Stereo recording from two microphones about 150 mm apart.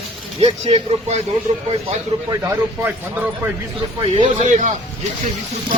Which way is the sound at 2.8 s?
10° right (ahead or behind).